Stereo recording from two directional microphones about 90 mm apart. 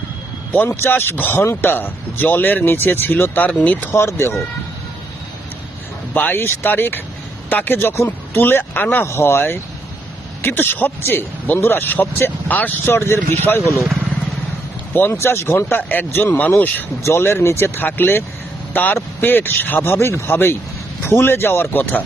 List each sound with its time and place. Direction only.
0.5 s speech: 20° left (ahead or behind)
3.9 s speech: 25° left (ahead or behind)
6.1 s speech: 20° left (ahead or behind)
14.9 s speech: 25° left (ahead or behind)